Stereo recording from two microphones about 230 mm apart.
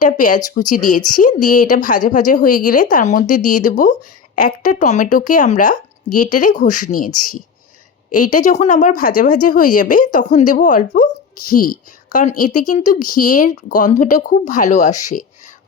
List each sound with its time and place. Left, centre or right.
0.0 s speech: left
6.1 s speech: left
6.4 s speech: left